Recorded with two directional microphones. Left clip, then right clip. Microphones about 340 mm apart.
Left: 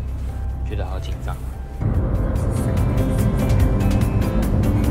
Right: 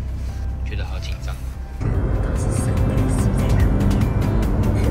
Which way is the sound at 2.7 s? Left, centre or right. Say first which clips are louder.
Even; centre.